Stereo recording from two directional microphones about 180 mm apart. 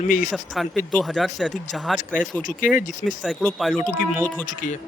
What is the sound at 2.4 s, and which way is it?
Speech, 45° left (ahead or behind).